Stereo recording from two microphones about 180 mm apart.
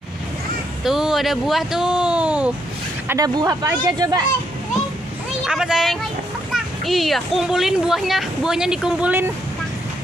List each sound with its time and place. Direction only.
0.8 s speech: centre (ahead or behind)
3.1 s speech: 20° right (ahead or behind)
5.4 s speech: 5° right (ahead or behind)